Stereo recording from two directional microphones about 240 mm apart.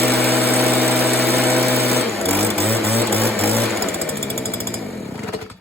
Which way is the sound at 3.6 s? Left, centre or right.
Centre.